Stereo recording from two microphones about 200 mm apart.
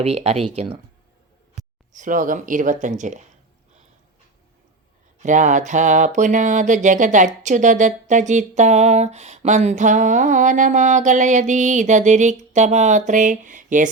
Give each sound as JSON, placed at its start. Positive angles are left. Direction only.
{"t": 0.0, "sound": "speech", "side_deg": -30}
{"t": 5.2, "sound": "speech", "side_deg": -40}